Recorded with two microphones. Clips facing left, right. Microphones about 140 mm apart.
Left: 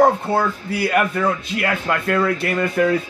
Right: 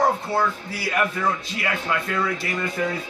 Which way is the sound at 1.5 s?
60° left (ahead or behind).